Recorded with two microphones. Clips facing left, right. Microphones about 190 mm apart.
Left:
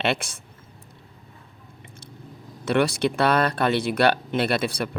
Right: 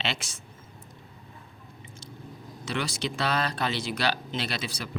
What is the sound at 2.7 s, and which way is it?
Speech, 60° left (ahead or behind).